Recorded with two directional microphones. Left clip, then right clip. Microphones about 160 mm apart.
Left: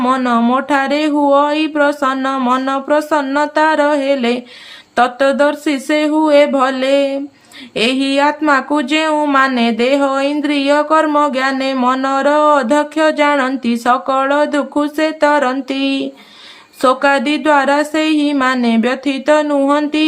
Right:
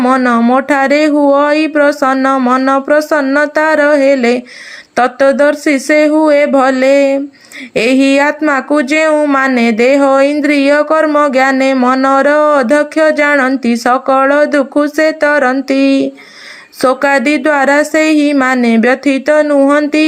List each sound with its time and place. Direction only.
0.0 s speech: 25° right (ahead or behind)